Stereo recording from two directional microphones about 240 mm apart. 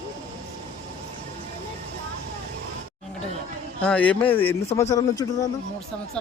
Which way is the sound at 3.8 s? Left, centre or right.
Centre.